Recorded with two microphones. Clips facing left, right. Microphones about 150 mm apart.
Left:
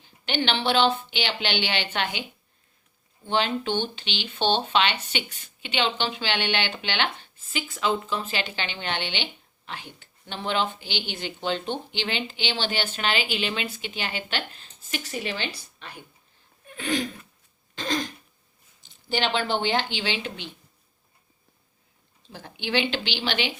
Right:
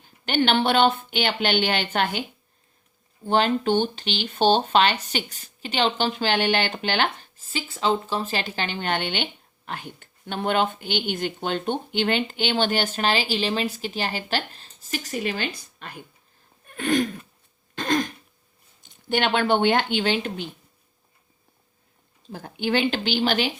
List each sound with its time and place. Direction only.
0.0 s speech: 50° right (ahead or behind)
3.2 s speech: 45° right (ahead or behind)
16.6 s a sound: 50° right (ahead or behind)
17.7 s throat clearing: 55° right (ahead or behind)
18.8 s speech: 55° right (ahead or behind)
22.3 s speech: 45° right (ahead or behind)